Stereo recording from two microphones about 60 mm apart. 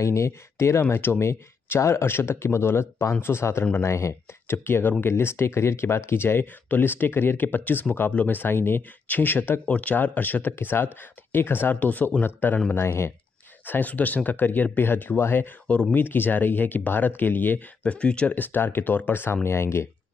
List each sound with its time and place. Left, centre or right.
0.0 s speech: left
0.7 s speech: left
12.7 s speech: left
13.7 s speech: left
15.6 s speech: centre
15.9 s speech: left
17.8 s speech: centre
18.3 s speech: left